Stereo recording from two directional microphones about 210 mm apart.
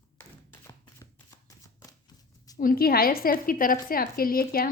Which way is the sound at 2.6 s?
45° left (ahead or behind).